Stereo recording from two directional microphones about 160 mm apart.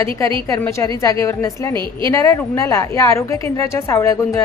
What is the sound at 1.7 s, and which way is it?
Speech, 30° right (ahead or behind).